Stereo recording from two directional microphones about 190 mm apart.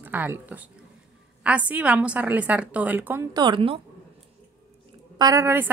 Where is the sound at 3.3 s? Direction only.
25° right (ahead or behind).